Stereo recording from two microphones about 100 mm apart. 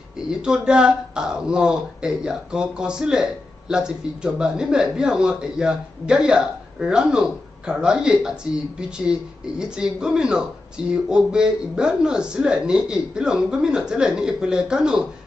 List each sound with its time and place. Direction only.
0.3 s speech: 10° right (ahead or behind)